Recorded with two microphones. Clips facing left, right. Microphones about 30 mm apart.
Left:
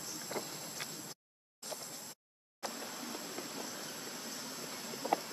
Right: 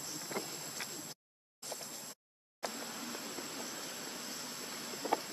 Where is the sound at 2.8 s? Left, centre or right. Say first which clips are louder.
Even; centre.